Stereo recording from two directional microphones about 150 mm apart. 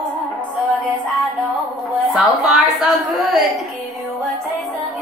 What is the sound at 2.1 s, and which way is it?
A woman's voice, centre (ahead or behind).